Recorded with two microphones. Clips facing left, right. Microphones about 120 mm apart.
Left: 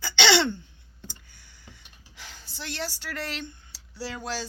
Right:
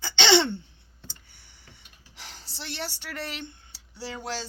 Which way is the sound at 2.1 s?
35° right (ahead or behind).